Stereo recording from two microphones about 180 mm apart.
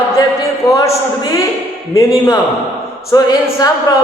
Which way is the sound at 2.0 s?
20° left (ahead or behind).